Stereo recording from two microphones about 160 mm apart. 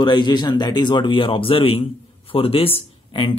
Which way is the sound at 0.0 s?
25° left (ahead or behind).